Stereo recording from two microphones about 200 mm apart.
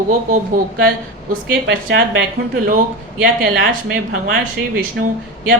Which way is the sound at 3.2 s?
45° right (ahead or behind).